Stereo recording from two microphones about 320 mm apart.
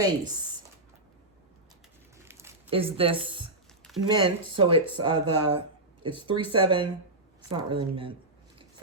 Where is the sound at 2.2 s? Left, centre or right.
Centre.